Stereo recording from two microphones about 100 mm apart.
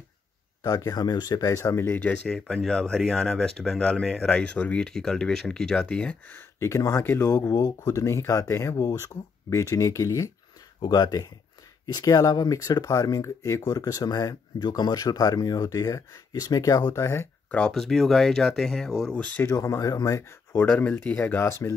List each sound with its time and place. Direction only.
0.7 s speech: 40° left (ahead or behind); by 2.1 s 20° left (ahead or behind)
2.2 s speech: 5° left (ahead or behind)
6.3 s speech: 30° left (ahead or behind)
17.5 s speech: 10° left (ahead or behind)
19.5 s speech: 30° left (ahead or behind)
20.5 s speech: 15° left (ahead or behind)